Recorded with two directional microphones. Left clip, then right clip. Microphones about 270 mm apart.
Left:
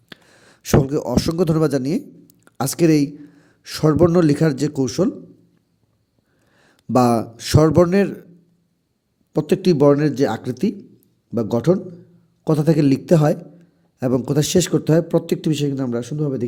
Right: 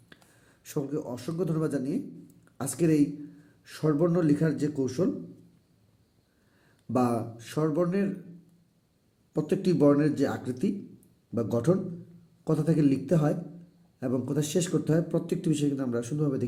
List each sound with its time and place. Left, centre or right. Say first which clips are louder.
0.1 s speech: left 13 dB; left
6.6 s speech: left 11 dB; left
9.3 s speech: left 10 dB; left